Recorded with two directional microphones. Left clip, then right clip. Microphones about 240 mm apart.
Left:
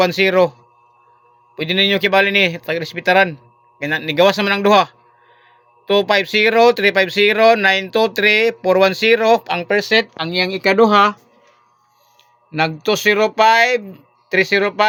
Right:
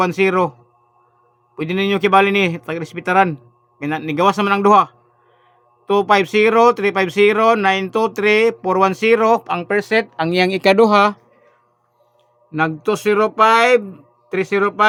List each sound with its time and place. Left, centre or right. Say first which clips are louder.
0.0 s speech: left 2 dB; centre
1.5 s speech: left 4 dB; centre
10.2 s speech: right 2 dB; right
12.5 s speech: left 1 dB; centre